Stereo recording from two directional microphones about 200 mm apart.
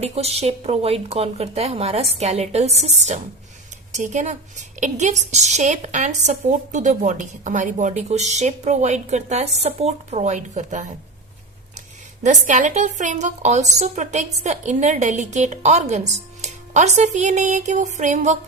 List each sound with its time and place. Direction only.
0.0 s a woman's voice: 30° right (ahead or behind)
12.2 s a woman's voice: 35° right (ahead or behind)